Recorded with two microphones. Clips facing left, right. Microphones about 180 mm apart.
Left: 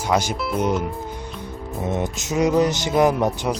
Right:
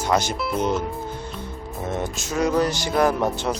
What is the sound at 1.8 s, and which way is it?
Music, 20° left (ahead or behind).